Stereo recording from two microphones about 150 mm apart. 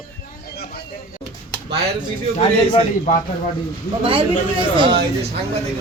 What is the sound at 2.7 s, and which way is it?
Speech, 45° left (ahead or behind).